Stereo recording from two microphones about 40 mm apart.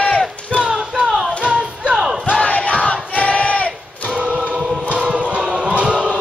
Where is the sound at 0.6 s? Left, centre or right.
Right.